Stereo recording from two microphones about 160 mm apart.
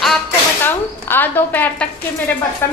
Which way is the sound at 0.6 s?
10° left (ahead or behind).